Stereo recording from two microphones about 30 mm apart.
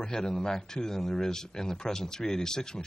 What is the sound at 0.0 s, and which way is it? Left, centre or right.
Speech, left.